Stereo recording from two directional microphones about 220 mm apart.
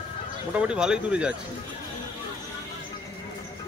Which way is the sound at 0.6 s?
5° right (ahead or behind).